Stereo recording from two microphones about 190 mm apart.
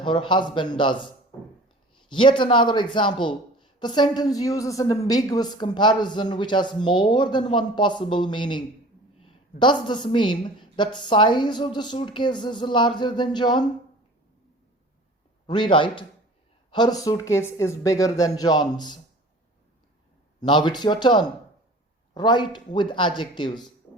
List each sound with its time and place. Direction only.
0.0 s a man's voice: 25° left (ahead or behind)
2.0 s a man's voice: 25° left (ahead or behind)
15.4 s a man's voice: 25° left (ahead or behind)
20.4 s a man's voice: 25° left (ahead or behind)